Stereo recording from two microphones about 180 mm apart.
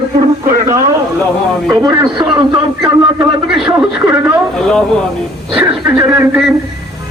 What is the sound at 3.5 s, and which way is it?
Speech, centre (ahead or behind).